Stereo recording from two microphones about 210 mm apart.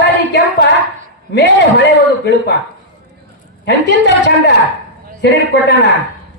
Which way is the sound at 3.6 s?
55° left (ahead or behind).